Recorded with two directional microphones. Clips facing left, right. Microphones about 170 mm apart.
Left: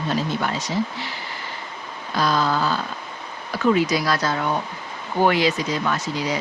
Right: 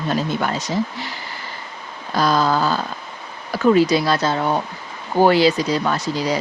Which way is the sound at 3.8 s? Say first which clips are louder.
Right 5 dB; 30° right (ahead or behind).